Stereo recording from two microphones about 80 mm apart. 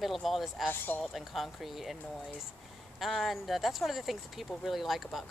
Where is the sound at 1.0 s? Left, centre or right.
Centre.